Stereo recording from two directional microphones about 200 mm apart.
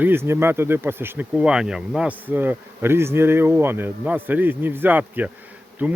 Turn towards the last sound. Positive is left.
turn(degrees=-10)  # may be behind; listen again after turning